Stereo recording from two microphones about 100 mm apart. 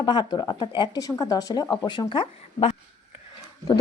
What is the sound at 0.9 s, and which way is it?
Speech, 35° left (ahead or behind).